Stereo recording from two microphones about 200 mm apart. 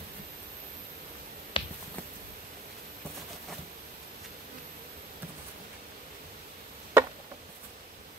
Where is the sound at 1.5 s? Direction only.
25° left (ahead or behind).